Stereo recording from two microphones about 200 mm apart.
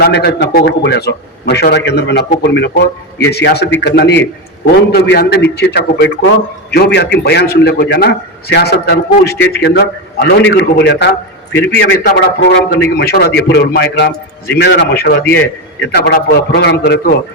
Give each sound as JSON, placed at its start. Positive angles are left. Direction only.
{"t": 0.0, "sound": "a man's voice", "side_deg": 55}